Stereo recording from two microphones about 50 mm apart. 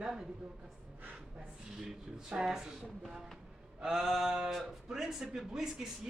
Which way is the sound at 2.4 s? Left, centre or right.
Centre.